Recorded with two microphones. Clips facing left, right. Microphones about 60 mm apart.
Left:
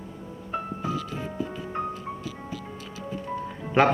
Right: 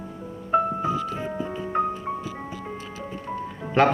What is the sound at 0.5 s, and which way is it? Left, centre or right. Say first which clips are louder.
Music: right 8 dB; right.